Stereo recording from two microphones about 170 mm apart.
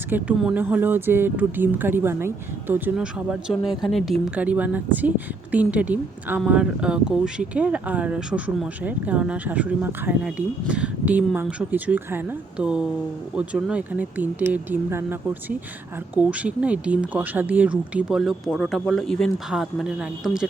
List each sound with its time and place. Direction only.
0.1 s speech: 10° right (ahead or behind)